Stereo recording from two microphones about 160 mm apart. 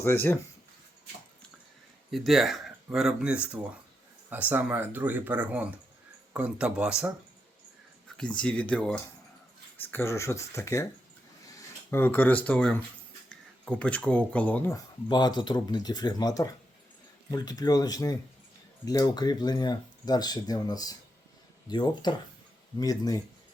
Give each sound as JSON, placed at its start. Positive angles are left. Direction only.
{"t": 0.0, "sound": "speech", "side_deg": 15}
{"t": 2.0, "sound": "speech", "side_deg": 0}
{"t": 8.2, "sound": "speech", "side_deg": 5}
{"t": 11.9, "sound": "speech", "side_deg": 15}
{"t": 15.1, "sound": "speech", "side_deg": 25}